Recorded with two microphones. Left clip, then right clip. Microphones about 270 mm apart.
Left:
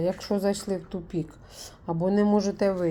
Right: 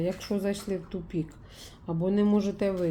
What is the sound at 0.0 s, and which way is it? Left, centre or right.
Speech, left.